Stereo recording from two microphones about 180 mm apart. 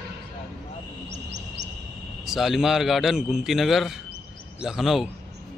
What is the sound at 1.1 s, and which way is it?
Music, 75° right (ahead or behind).